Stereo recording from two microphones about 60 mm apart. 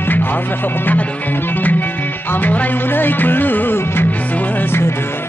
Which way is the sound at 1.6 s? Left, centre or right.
Left.